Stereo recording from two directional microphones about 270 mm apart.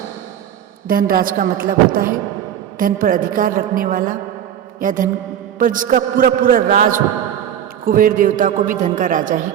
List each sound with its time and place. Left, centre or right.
0.9 s a woman's voice: right